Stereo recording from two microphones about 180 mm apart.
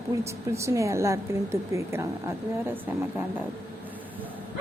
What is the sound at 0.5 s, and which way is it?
A woman's voice, 15° right (ahead or behind).